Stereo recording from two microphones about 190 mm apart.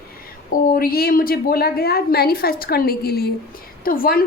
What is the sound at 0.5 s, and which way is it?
A woman's voice, 50° left (ahead or behind).